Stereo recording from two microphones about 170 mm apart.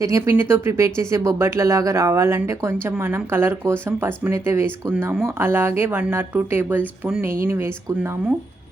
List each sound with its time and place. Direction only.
0.0 s speech: 20° right (ahead or behind)